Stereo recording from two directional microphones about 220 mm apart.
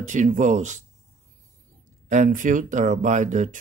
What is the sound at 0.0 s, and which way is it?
Speech, 35° right (ahead or behind).